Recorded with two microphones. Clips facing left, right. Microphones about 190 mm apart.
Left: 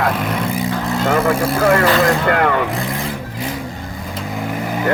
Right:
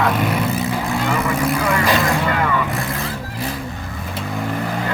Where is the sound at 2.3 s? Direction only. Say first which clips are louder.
Left 4 dB; 60° left (ahead or behind).